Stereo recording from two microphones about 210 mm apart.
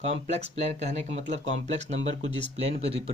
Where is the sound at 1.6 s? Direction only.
30° right (ahead or behind).